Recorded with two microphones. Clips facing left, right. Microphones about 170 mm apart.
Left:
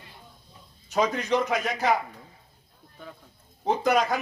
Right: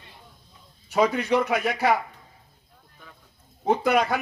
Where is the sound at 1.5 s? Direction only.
60° right (ahead or behind).